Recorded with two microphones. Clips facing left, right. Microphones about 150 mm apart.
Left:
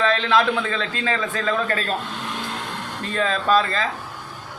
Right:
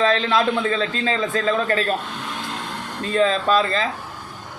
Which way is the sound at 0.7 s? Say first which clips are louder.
Right 3 dB; 25° right (ahead or behind).